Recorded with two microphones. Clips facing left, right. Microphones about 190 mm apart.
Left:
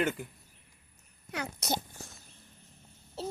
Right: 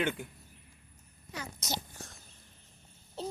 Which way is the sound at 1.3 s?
65° left (ahead or behind).